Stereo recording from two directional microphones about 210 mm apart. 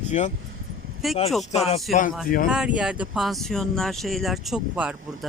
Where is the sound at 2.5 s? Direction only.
5° right (ahead or behind).